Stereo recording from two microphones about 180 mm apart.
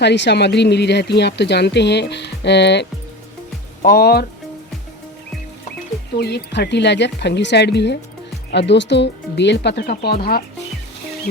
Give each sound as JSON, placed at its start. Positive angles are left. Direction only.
{"t": 0.0, "sound": "speech", "side_deg": 75}
{"t": 3.8, "sound": "speech", "side_deg": 60}
{"t": 6.1, "sound": "speech", "side_deg": 65}